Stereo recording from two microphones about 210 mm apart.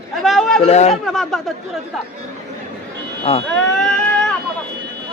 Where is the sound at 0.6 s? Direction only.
30° left (ahead or behind).